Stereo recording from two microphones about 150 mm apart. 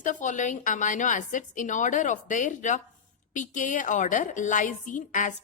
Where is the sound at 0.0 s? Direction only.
55° left (ahead or behind).